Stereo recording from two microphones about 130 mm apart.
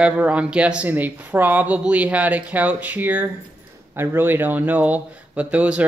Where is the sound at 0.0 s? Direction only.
10° right (ahead or behind).